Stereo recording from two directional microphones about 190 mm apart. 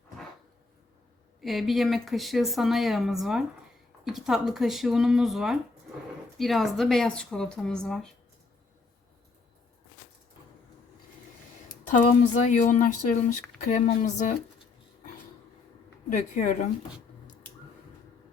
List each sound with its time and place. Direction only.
1.4 s a woman's voice: centre (ahead or behind)
12.5 s speech: 40° left (ahead or behind)
16.0 s speech: 40° left (ahead or behind)